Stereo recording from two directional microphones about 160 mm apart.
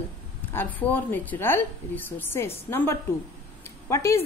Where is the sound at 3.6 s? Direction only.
20° left (ahead or behind).